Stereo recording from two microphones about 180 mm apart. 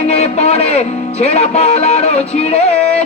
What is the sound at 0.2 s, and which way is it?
Speech, 35° left (ahead or behind).